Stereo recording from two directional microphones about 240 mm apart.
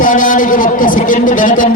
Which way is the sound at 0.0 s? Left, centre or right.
Left.